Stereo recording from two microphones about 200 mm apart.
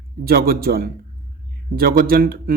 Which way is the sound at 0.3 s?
50° right (ahead or behind).